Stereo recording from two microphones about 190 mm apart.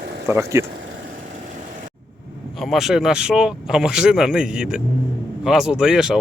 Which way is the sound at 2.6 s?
Centre (ahead or behind).